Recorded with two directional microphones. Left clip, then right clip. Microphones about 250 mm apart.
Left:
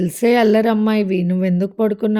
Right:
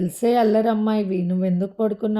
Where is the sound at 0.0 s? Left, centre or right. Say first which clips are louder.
Left 4 dB; left.